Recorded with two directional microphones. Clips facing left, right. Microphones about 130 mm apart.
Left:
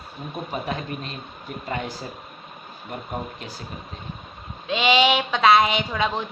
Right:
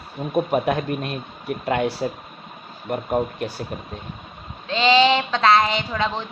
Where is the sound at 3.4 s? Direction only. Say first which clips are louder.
Right 9 dB; 60° right (ahead or behind).